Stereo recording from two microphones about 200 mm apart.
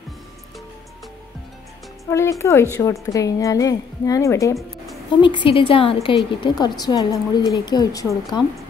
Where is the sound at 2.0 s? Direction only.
15° left (ahead or behind).